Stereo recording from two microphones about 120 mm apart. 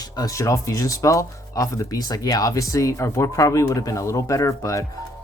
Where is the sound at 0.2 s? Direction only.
25° left (ahead or behind).